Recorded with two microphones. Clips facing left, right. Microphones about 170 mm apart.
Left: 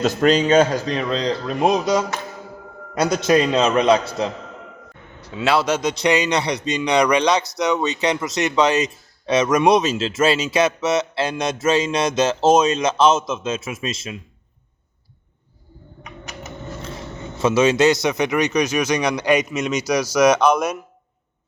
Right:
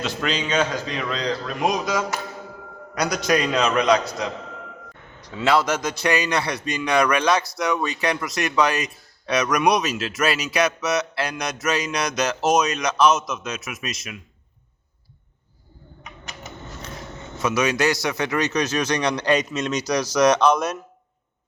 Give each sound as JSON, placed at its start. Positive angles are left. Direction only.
{"t": 0.0, "sound": "a man's voice", "side_deg": 45}
{"t": 5.3, "sound": "a man's voice", "side_deg": 15}
{"t": 17.4, "sound": "a man's voice", "side_deg": 25}